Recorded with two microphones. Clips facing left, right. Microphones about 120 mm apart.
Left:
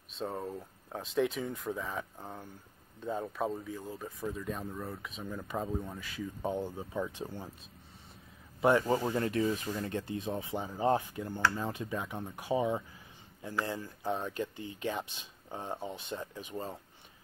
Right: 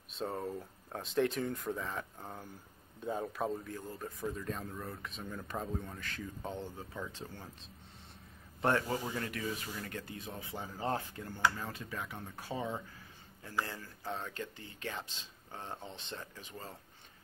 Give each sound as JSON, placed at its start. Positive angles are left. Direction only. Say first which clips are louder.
{"t": 0.1, "sound": "speech", "louder": "left 1 dB", "side_deg": 0}
{"t": 8.5, "sound": "a man's voice", "louder": "left 5 dB", "side_deg": 10}
{"t": 9.1, "sound": "speech", "louder": "left 8 dB", "side_deg": 25}